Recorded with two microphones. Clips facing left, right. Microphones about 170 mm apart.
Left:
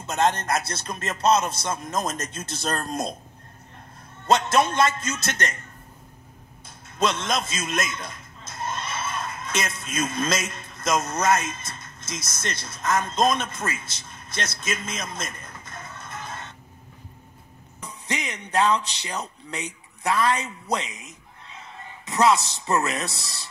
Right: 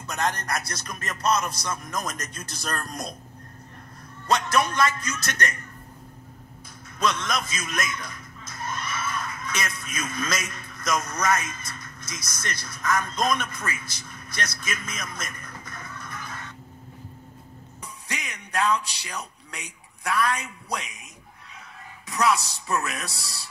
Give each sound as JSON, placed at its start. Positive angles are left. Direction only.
{"t": 0.0, "sound": "speech", "side_deg": 25}
{"t": 4.3, "sound": "speech", "side_deg": 25}
{"t": 7.0, "sound": "a man's voice", "side_deg": 25}
{"t": 17.8, "sound": "a man's voice", "side_deg": 30}